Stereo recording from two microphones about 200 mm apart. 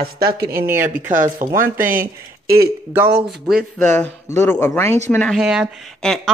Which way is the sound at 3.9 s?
15° left (ahead or behind).